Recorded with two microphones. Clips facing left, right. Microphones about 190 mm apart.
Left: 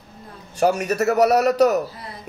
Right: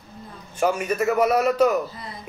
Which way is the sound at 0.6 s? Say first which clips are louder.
Left 3 dB; 40° left (ahead or behind).